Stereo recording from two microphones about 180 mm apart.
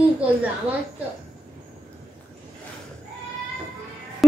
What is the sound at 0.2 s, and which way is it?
Speech, 10° right (ahead or behind).